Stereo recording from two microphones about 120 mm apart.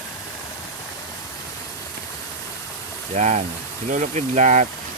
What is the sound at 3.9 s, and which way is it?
Speech, 85° right.